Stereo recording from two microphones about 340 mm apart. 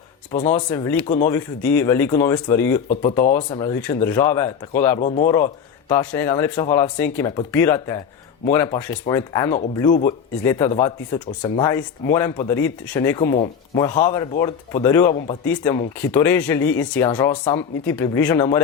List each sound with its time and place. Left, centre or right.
0.3 s speech: left
0.7 s speech: centre
1.0 s speech: left
1.3 s speech: centre
4.9 s speech: left
5.9 s speech: centre